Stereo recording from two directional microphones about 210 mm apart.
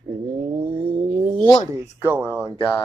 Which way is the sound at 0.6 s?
25° right (ahead or behind).